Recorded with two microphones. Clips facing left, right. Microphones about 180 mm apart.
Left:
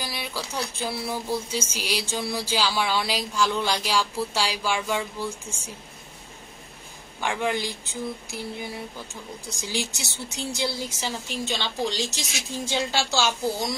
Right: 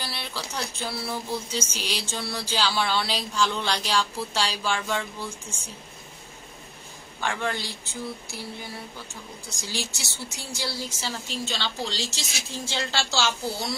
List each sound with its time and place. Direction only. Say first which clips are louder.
0.0 s a sound: left 2 dB; 10° left (ahead or behind)
0.8 s speech: left 3 dB; 15° left (ahead or behind)
7.2 s speech: left 3 dB; 15° left (ahead or behind)